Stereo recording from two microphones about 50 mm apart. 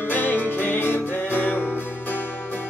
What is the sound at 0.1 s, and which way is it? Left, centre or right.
Music, left.